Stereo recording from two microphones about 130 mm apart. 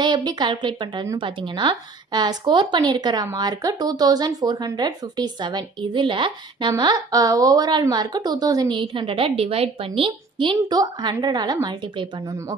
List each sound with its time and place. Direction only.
0.0 s a woman's voice: 35° right (ahead or behind)